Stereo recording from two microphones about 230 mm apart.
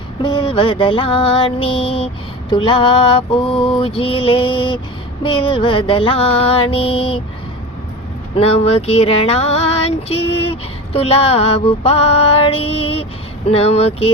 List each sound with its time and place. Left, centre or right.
0.2 s female singing: centre
8.4 s female singing: left